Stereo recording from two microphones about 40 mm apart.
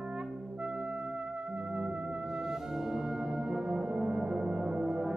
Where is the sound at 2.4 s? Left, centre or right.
Centre.